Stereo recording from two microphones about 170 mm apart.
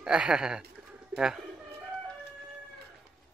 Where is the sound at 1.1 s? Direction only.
5° right (ahead or behind).